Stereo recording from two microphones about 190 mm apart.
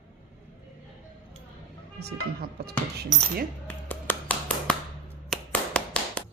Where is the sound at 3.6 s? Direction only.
10° left (ahead or behind).